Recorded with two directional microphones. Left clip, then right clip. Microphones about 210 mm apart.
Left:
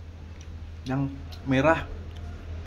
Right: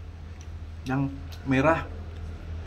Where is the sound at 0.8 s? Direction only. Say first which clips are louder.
Right 1 dB; 5° left (ahead or behind).